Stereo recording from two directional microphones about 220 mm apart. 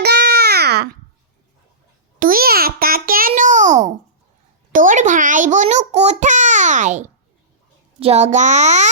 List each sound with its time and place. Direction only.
0.0 s babbling: 50° right (ahead or behind)
2.1 s babbling: 40° right (ahead or behind)
4.7 s a sound: 35° right (ahead or behind)
7.9 s a child's voice: 30° right (ahead or behind)